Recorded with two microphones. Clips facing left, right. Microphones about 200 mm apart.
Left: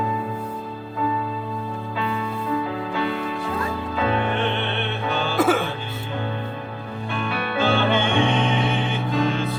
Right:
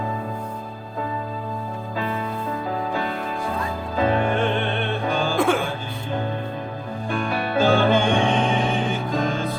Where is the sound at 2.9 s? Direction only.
45° right (ahead or behind).